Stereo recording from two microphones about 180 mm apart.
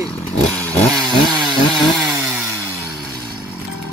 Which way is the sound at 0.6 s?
5° left (ahead or behind).